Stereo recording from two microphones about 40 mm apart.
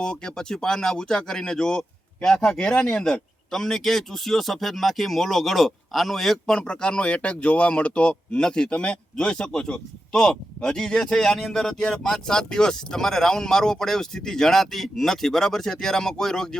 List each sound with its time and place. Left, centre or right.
0.0 s speech: centre
2.7 s speech: left
3.0 s speech: centre
6.5 s speech: left
8.4 s speech: centre
11.8 s speech: left